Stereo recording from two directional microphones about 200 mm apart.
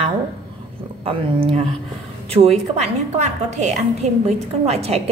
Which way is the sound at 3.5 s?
35° right (ahead or behind).